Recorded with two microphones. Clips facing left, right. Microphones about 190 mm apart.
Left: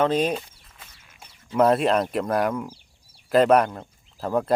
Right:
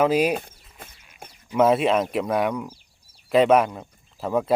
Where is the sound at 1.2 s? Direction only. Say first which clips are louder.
Right 7 dB; 50° right (ahead or behind).